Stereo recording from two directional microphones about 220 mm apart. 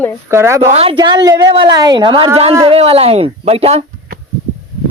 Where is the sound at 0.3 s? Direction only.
10° right (ahead or behind).